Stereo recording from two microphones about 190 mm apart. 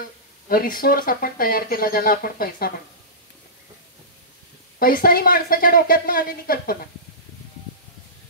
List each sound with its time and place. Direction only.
0.5 s speech: 50° left (ahead or behind)
4.7 s speech: 50° left (ahead or behind)